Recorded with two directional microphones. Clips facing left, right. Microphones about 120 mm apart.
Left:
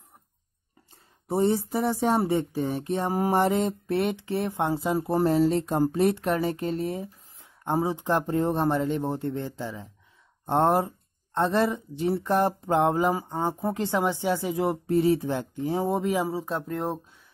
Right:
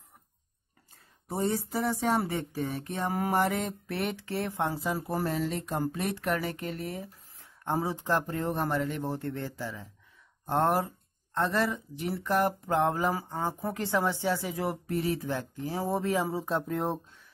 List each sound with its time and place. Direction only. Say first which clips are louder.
1.3 s speech: left 6 dB; 25° left (ahead or behind)
16.3 s speech: left 1 dB; centre (ahead or behind)